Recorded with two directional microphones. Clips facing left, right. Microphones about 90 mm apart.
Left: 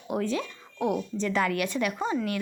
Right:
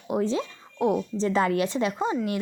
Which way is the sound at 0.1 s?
25° right (ahead or behind).